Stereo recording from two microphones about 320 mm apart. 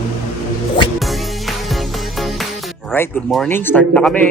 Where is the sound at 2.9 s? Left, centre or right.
Centre.